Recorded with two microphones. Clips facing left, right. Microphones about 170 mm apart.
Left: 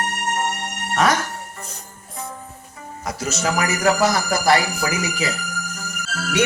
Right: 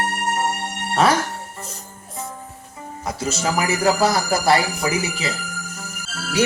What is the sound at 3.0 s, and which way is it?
Speech, 30° right (ahead or behind).